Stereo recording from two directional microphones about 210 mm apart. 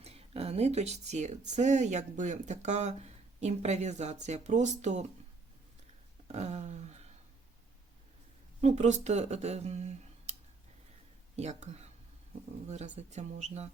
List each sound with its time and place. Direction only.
0.0 s speech: 30° right (ahead or behind)
6.2 s a sound: 35° right (ahead or behind)
8.6 s speech: 35° right (ahead or behind)
11.3 s speech: 30° right (ahead or behind)